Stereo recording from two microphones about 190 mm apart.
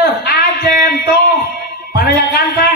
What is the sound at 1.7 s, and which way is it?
Speech, 55° left (ahead or behind).